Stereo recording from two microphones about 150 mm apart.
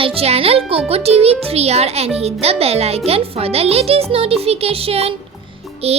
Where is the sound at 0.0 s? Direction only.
40° right (ahead or behind).